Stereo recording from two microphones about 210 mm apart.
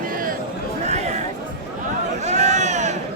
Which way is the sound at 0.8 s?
30° right (ahead or behind).